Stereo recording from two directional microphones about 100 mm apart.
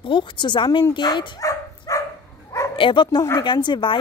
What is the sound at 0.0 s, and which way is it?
Speech, 55° left (ahead or behind).